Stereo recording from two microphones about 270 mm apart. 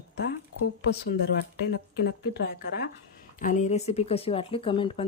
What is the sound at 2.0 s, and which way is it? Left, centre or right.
A woman's voice, left.